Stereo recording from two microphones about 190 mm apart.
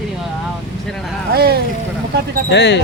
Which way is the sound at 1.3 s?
55° right (ahead or behind).